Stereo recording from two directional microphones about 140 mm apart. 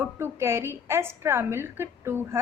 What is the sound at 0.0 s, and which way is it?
A woman's voice, 20° right (ahead or behind).